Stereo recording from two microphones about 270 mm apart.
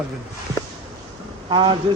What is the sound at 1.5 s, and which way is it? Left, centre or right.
Speech, centre.